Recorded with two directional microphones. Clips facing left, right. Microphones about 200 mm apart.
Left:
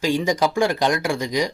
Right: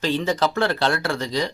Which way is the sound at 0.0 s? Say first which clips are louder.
Left 2 dB; 10° left (ahead or behind).